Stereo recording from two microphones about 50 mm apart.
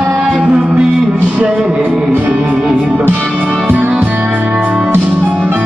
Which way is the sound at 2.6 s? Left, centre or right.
Centre.